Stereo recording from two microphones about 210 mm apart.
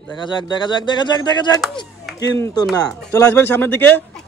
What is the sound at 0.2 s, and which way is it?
Speech, 20° left (ahead or behind).